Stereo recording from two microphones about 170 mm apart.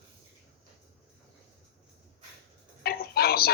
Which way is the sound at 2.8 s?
65° left (ahead or behind).